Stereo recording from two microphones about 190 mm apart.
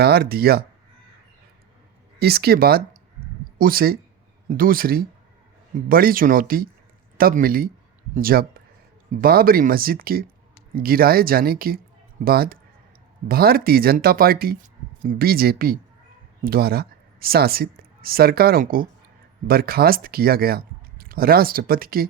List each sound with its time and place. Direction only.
0.0 s speech: 55° right (ahead or behind)
2.1 s speech: 55° right (ahead or behind)